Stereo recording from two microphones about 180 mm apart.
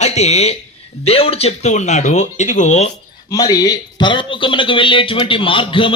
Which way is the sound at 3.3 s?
20° left (ahead or behind).